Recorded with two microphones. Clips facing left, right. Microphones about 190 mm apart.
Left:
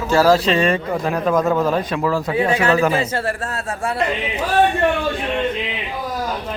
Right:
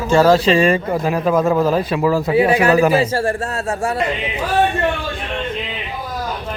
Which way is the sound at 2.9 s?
30° right (ahead or behind).